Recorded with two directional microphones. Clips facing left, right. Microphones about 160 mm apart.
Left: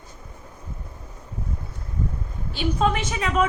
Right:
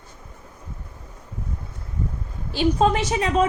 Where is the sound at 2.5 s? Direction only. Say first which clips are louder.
Right 4 dB; 40° right (ahead or behind).